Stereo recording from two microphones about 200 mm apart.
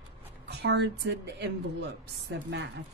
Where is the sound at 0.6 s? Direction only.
60° right (ahead or behind).